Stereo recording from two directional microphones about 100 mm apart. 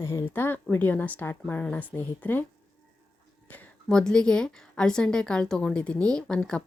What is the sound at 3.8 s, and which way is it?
Speech, 5° left (ahead or behind).